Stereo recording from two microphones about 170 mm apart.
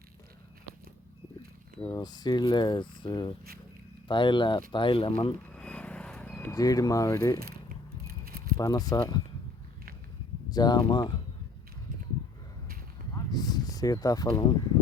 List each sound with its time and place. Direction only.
2.0 s speech: 25° left (ahead or behind)
5.5 s vehicle: 5° left (ahead or behind)
6.5 s speech: 20° left (ahead or behind)
8.0 s keys jangling: 60° right (ahead or behind)
8.5 s speech: 20° left (ahead or behind)
10.5 s speech: 25° left (ahead or behind)
13.1 s a sound: 20° left (ahead or behind)